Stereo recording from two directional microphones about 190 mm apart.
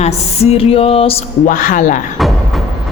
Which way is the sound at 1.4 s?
45° left (ahead or behind).